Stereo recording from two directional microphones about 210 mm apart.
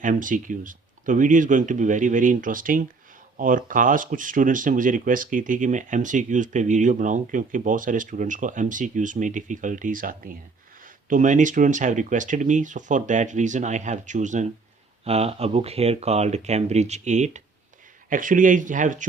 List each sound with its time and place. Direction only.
0.0 s speech: 40° right (ahead or behind)